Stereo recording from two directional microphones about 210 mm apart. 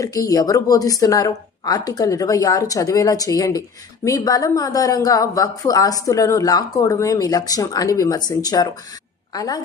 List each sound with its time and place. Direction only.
0.0 s a woman's voice: 15° left (ahead or behind)